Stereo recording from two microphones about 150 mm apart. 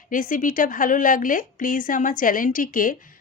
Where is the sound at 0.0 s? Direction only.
65° left (ahead or behind).